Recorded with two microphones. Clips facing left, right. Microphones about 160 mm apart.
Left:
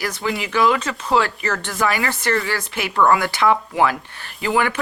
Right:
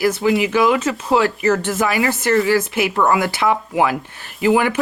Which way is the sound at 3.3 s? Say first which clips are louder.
Even; 10° right (ahead or behind).